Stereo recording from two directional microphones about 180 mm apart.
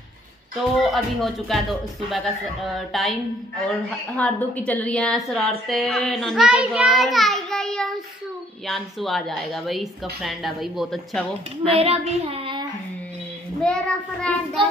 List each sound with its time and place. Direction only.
0.9 s a woman's voice: centre (ahead or behind)
11.7 s speech: 35° right (ahead or behind)
13.6 s speech: 5° left (ahead or behind)